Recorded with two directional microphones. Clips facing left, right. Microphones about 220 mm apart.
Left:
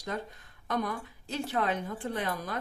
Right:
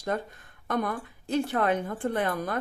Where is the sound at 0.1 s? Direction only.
50° right (ahead or behind).